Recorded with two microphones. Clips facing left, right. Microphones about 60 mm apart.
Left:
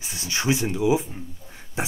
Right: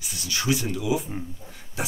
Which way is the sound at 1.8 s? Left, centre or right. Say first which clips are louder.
Left 2 dB; left.